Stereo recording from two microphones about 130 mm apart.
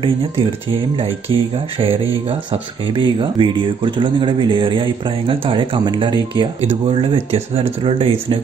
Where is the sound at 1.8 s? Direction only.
45° right (ahead or behind).